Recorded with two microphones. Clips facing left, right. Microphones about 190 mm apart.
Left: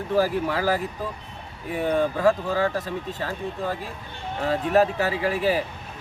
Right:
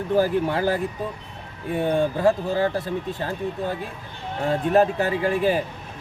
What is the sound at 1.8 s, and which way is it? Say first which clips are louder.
Speech: right 1 dB; 25° right (ahead or behind).